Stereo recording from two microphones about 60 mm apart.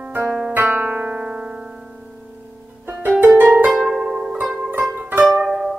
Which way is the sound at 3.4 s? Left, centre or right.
Right.